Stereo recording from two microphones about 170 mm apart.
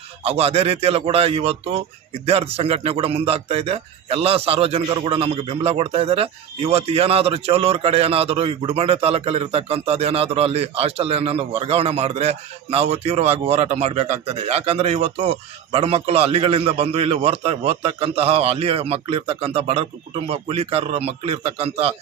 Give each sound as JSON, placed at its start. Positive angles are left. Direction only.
{"t": 0.2, "sound": "a man's voice", "side_deg": -35}